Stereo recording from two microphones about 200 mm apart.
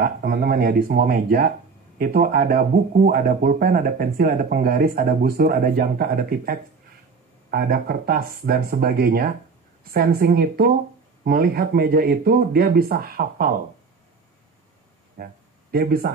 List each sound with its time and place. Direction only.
0.0 s speech: 50° right (ahead or behind)
15.2 s speech: 50° right (ahead or behind)